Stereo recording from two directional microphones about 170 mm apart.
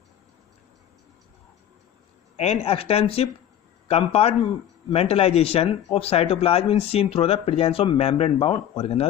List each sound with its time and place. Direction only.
2.3 s speech: 40° left (ahead or behind)